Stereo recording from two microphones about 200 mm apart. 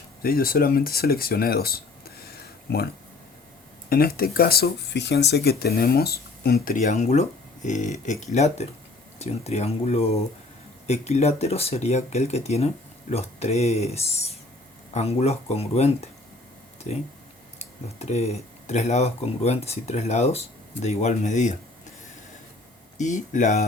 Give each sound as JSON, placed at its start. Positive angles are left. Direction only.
{"t": 0.2, "sound": "speech", "side_deg": 50}
{"t": 23.0, "sound": "speech", "side_deg": 40}